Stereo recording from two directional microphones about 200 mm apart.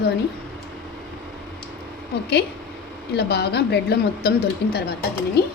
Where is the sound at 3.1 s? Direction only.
55° left (ahead or behind).